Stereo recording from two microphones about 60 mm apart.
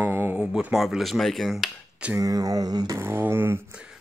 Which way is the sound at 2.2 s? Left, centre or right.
Right.